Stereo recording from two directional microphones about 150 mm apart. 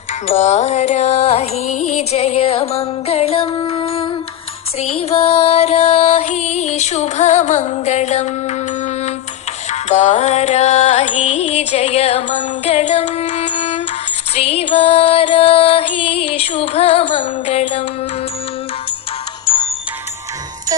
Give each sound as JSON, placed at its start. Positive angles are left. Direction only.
{"t": 0.3, "sound": "music", "side_deg": 50}